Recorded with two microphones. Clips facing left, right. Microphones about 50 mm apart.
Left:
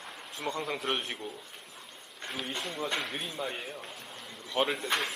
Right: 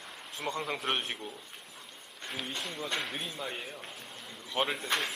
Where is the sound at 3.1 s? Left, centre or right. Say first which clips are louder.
Left 2 dB; centre.